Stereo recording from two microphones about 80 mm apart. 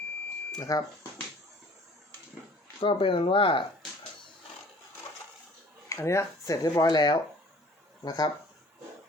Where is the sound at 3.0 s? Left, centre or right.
Left.